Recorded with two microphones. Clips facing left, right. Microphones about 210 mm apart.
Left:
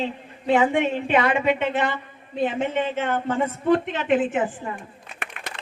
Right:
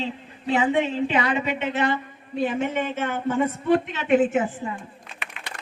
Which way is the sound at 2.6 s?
45° right (ahead or behind).